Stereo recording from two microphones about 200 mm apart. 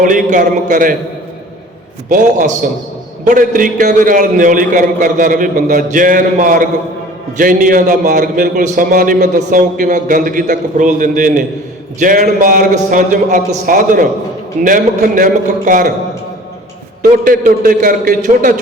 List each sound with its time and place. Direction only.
0.0 s a man's voice: 40° right (ahead or behind)
2.0 s a man's voice: 40° right (ahead or behind)
17.0 s a man's voice: 40° right (ahead or behind)